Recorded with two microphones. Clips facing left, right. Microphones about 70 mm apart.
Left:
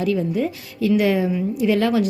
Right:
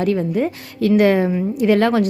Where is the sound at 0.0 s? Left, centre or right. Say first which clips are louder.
Right 2 dB; right.